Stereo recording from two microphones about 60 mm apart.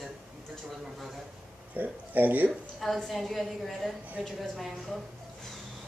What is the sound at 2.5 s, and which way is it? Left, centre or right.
A woman's voice, centre.